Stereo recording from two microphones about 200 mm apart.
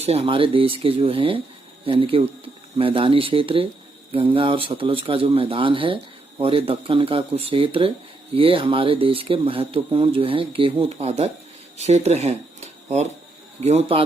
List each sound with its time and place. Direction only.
0.0 s a man's voice: 30° right (ahead or behind)